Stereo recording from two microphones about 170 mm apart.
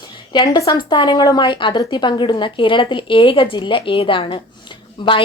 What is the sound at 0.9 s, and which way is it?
A woman's voice, 25° left (ahead or behind).